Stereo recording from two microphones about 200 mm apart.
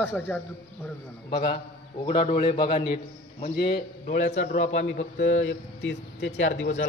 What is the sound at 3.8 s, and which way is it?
Speech, 50° left (ahead or behind).